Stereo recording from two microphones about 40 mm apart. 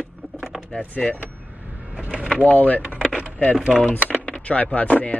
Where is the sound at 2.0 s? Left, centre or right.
Right.